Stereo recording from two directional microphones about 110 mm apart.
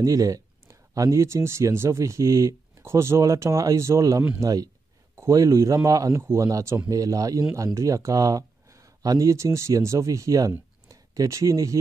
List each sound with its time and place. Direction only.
0.0 s speech: 30° right (ahead or behind)